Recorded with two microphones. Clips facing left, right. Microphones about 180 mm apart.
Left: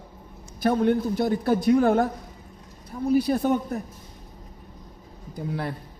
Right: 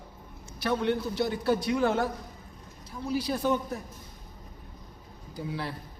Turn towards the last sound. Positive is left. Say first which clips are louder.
# left 4 dB
turn(degrees=50)  # may be behind; listen again after turning